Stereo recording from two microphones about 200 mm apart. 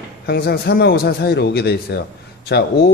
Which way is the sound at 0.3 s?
50° left (ahead or behind).